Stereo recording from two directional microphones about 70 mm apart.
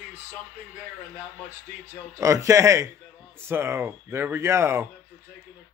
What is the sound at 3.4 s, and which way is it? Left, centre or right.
Speech, right.